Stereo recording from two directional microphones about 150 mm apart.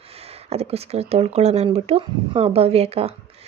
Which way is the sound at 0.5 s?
45° right (ahead or behind).